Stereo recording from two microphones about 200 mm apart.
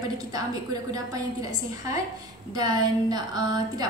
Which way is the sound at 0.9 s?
20° right (ahead or behind).